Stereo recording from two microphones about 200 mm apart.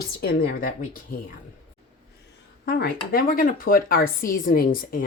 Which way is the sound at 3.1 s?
45° left (ahead or behind).